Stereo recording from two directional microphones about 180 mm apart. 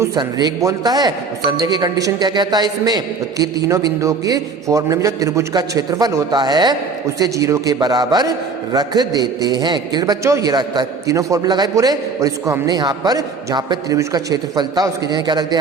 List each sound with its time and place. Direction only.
0.0 s a man's voice: 25° right (ahead or behind)